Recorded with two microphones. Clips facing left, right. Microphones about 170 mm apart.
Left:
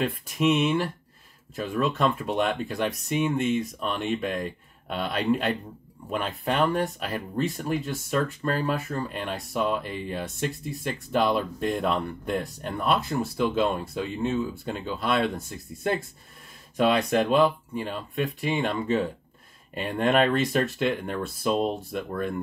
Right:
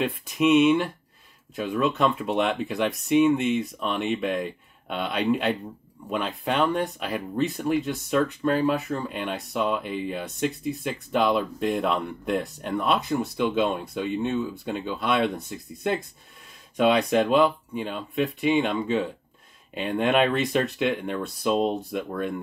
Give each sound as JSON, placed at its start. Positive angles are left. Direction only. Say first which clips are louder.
{"t": 0.4, "sound": "speech", "louder": "right 4 dB", "side_deg": 0}
{"t": 2.4, "sound": "speech", "louder": "even", "side_deg": 0}
{"t": 20.1, "sound": "speech", "louder": "left 1 dB", "side_deg": 0}